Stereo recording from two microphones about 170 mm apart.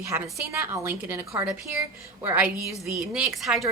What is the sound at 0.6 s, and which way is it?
A woman's voice, 15° right (ahead or behind).